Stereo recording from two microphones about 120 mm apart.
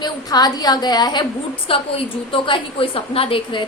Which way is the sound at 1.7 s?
50° left (ahead or behind).